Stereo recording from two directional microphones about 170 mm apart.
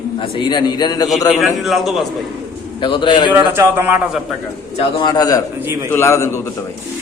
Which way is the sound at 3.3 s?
15° right (ahead or behind).